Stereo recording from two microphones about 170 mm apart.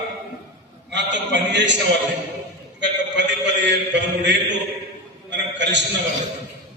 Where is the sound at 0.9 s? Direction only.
90° right.